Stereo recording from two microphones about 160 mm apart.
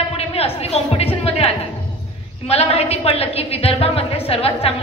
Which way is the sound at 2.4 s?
40° left (ahead or behind).